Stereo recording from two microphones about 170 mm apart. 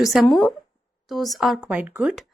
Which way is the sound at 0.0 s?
Centre (ahead or behind).